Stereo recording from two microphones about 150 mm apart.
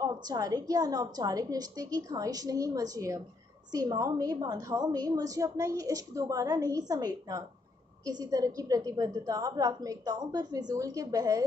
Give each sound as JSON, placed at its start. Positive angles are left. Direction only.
{"t": 0.0, "sound": "a woman's voice", "side_deg": -25}